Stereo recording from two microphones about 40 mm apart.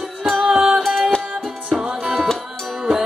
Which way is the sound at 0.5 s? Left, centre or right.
Centre.